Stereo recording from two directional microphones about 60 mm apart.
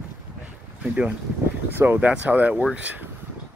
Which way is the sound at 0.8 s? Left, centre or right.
Right.